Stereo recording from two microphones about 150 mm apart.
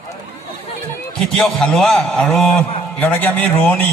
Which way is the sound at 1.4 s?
Centre (ahead or behind).